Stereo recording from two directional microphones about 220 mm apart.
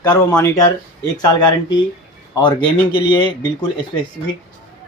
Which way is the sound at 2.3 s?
20° left (ahead or behind).